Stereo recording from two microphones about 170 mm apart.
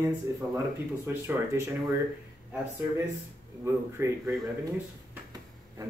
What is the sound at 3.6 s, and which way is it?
Speech, 15° right (ahead or behind).